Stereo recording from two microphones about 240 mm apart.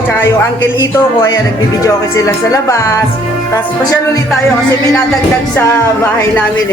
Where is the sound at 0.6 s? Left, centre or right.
Centre.